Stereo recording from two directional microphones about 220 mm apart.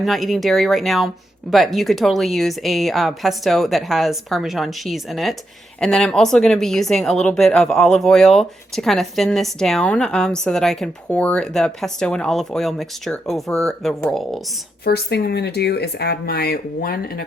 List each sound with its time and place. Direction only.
0.0 s speech: centre (ahead or behind)
14.8 s speech: 45° left (ahead or behind)